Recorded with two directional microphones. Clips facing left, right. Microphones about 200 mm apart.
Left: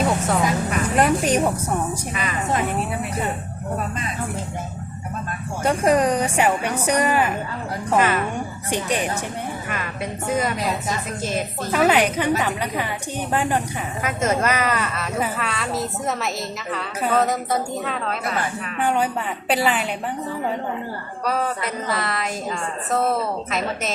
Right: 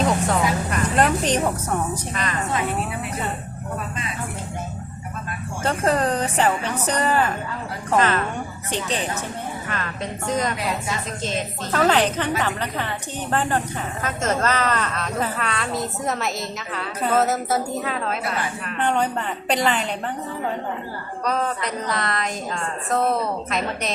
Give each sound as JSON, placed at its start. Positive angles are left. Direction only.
{"t": 0.0, "sound": "a sound", "side_deg": 5}
{"t": 5.6, "sound": "a woman's voice", "side_deg": 10}
{"t": 21.2, "sound": "a woman's voice", "side_deg": 5}